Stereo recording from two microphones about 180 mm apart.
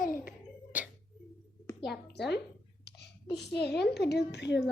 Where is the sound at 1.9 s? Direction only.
70° left (ahead or behind).